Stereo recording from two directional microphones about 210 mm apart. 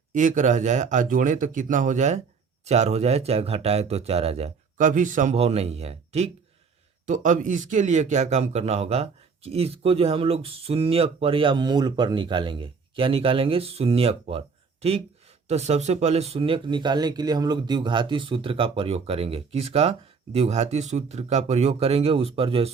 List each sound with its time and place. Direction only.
0.1 s speech: 40° right (ahead or behind)